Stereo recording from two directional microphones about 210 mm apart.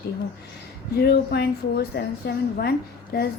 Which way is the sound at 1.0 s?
50° left (ahead or behind).